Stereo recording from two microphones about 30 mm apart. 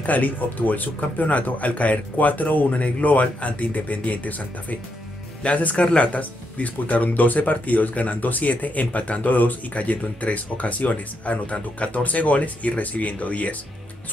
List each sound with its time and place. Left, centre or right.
0.0 s speech: left
5.4 s speech: left